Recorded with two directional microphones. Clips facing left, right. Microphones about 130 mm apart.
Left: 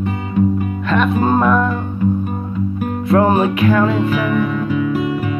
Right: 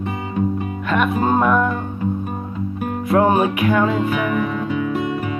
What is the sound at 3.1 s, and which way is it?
Music, 10° right (ahead or behind).